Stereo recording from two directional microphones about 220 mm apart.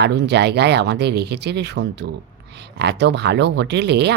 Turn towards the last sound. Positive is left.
turn(degrees=-50)  # may be behind; listen again after turning